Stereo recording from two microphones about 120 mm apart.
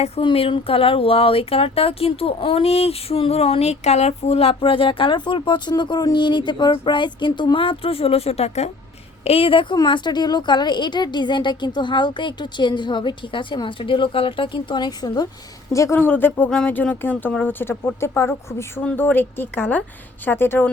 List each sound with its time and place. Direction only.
0.2 s speech: 45° left (ahead or behind); by 8.7 s 65° left (ahead or behind)
9.2 s a woman's voice: 50° left (ahead or behind); by 15.3 s 35° left (ahead or behind)
15.7 s speech: 20° left (ahead or behind)